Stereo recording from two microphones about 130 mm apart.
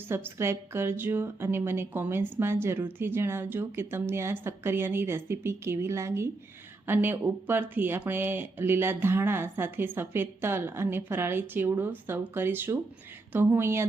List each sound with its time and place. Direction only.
0.1 s a woman's voice: 20° right (ahead or behind)